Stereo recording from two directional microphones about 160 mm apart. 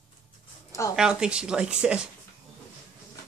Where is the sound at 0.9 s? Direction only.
5° right (ahead or behind).